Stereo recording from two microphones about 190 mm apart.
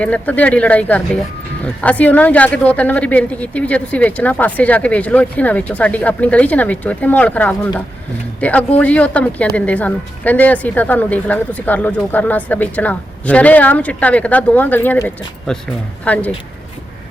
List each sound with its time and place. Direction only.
0.0 s speech: 10° left (ahead or behind)